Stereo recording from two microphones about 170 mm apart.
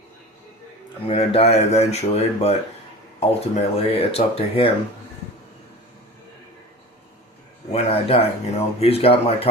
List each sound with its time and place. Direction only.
1.0 s speech: 35° left (ahead or behind)
7.7 s speech: 35° left (ahead or behind)